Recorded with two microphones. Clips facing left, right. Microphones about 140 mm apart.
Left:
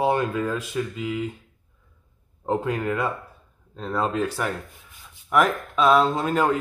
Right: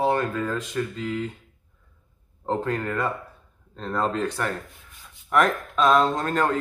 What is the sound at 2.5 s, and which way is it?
Speech, 10° left (ahead or behind).